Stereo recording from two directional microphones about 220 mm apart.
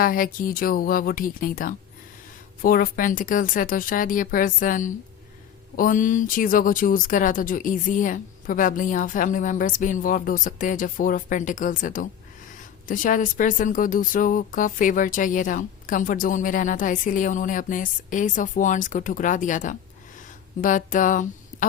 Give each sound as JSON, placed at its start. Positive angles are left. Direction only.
{"t": 0.0, "sound": "speech", "side_deg": 40}